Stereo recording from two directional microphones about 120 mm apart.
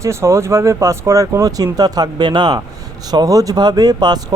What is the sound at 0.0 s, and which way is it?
Speech, 25° right (ahead or behind).